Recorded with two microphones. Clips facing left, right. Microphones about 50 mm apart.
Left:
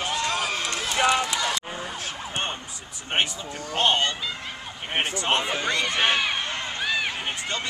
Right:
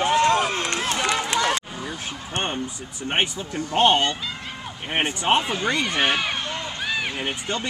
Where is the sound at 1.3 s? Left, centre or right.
Right.